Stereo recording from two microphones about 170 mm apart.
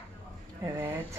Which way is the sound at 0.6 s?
15° right (ahead or behind).